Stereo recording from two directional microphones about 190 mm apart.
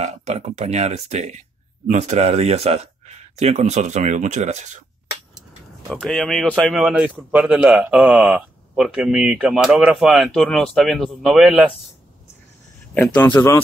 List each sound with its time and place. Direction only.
0.0 s speech: 35° right (ahead or behind)
5.9 s a man's voice: centre (ahead or behind)
12.9 s speech: 10° left (ahead or behind)